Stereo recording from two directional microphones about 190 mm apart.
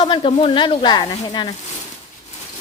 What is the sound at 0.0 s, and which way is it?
Speech, 25° left (ahead or behind).